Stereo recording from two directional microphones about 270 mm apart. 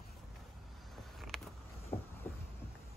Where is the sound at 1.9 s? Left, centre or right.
Left.